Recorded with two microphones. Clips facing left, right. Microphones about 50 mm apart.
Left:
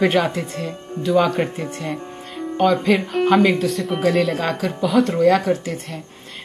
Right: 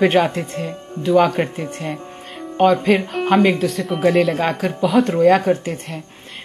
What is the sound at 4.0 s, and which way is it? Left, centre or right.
Speech, centre.